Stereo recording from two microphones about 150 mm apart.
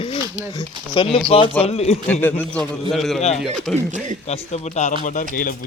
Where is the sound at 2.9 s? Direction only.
Centre (ahead or behind).